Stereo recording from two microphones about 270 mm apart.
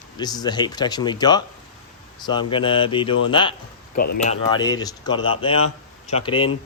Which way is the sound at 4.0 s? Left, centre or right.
Left.